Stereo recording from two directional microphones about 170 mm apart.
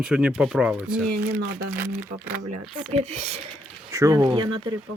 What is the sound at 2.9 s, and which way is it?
Speech, 40° right (ahead or behind).